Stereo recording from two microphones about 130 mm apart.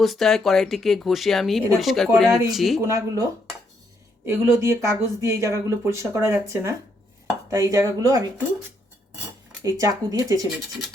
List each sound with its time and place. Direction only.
0.0 s speech: centre (ahead or behind)
2.8 s speech: 25° right (ahead or behind)
4.3 s speech: 20° right (ahead or behind)
9.6 s speech: 25° right (ahead or behind)